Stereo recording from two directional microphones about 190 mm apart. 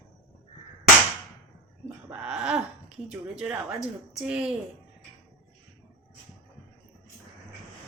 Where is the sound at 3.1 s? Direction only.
5° right (ahead or behind).